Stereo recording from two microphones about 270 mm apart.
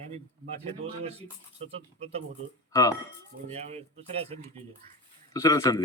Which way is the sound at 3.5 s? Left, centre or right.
Right.